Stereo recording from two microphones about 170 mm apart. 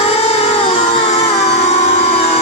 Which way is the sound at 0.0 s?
35° left (ahead or behind).